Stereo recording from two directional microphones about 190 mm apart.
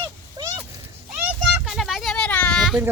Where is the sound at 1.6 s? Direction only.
Centre (ahead or behind).